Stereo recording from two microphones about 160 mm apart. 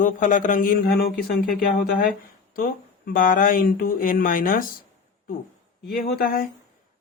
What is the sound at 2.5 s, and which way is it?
Speech, 60° left (ahead or behind).